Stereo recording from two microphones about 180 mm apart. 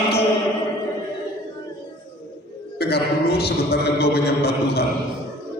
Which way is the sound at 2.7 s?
60° left (ahead or behind).